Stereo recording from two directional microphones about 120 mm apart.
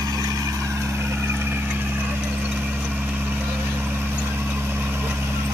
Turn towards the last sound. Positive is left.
turn(degrees=-15)  # may be behind; listen again after turning